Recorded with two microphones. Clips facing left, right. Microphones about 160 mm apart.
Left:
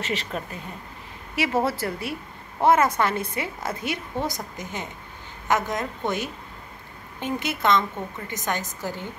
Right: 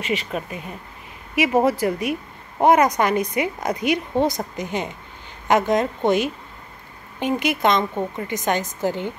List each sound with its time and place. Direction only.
0.0 s a woman's voice: 10° right (ahead or behind)